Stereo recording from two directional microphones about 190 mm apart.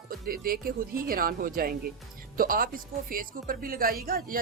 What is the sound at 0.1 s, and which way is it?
Speech, 50° right (ahead or behind).